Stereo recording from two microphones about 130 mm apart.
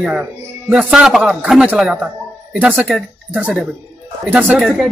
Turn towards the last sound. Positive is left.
turn(degrees=-5)  # may be behind; listen again after turning